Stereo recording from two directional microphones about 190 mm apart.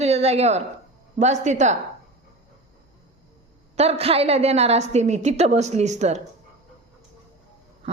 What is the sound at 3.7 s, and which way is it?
A woman's voice, 35° right (ahead or behind).